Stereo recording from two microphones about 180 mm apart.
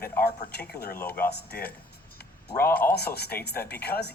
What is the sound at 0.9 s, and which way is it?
Speech, 10° left (ahead or behind).